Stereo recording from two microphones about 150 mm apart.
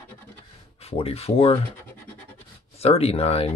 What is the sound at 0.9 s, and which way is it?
Speech, 40° left (ahead or behind).